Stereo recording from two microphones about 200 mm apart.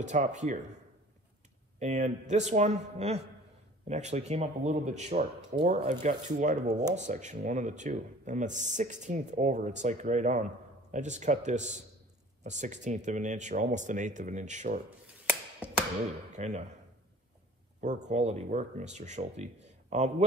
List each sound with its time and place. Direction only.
0.0 s speech: 35° right (ahead or behind)
1.8 s speech: 35° right (ahead or behind)
15.6 s tap: 5° right (ahead or behind)
16.3 s speech: 35° right (ahead or behind)
17.7 s speech: 35° right (ahead or behind)